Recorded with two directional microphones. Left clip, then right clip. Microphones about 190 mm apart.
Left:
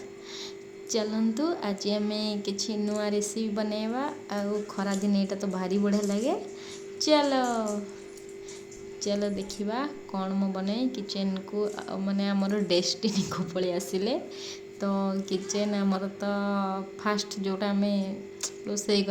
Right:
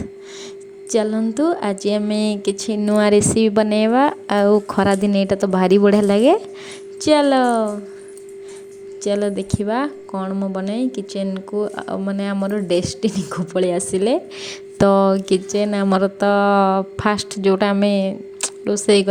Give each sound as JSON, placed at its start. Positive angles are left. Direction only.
{"t": 0.9, "sound": "a woman's voice", "side_deg": -40}
{"t": 9.0, "sound": "a woman's voice", "side_deg": -40}